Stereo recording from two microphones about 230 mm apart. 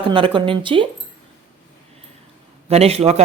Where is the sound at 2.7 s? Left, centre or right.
Right.